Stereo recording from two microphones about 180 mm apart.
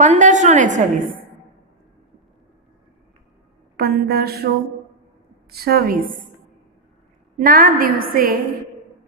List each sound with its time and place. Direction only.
0.0 s a woman's voice: 40° right (ahead or behind)
3.7 s a woman's voice: 60° right (ahead or behind)
5.5 s a woman's voice: 60° right (ahead or behind)
7.3 s a woman's voice: 50° right (ahead or behind)